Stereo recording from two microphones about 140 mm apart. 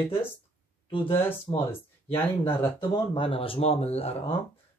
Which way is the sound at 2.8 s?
40° left (ahead or behind).